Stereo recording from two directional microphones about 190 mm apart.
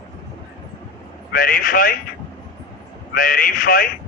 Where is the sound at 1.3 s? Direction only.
45° left (ahead or behind).